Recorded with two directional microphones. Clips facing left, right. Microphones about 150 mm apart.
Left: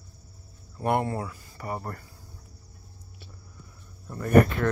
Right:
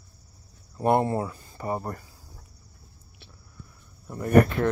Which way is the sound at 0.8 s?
25° right (ahead or behind).